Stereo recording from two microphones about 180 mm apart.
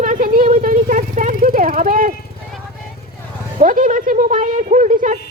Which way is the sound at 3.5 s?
50° right (ahead or behind).